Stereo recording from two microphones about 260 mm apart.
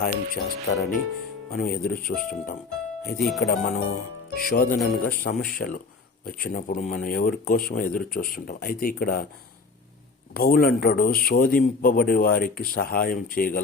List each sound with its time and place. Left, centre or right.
0.0 s a man's voice: left
3.2 s speech: centre
3.4 s a man's voice: left
10.3 s a man's voice: left